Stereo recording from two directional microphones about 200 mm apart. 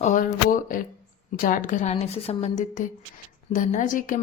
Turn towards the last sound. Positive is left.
turn(degrees=40)  # may be behind; listen again after turning